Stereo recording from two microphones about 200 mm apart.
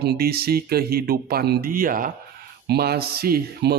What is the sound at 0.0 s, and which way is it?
Speech, 55° right (ahead or behind).